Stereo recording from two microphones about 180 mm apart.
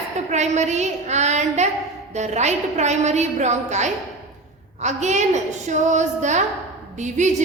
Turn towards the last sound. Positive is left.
turn(degrees=-40)  # may be behind; listen again after turning